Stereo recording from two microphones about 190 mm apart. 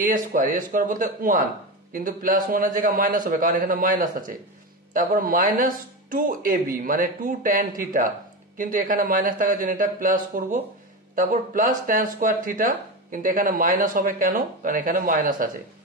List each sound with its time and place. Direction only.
0.0 s speech: 45° right (ahead or behind)